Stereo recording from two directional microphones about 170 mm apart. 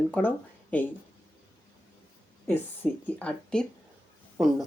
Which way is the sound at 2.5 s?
10° left (ahead or behind).